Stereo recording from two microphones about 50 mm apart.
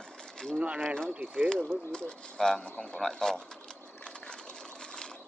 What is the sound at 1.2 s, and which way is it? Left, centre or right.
Speech, right.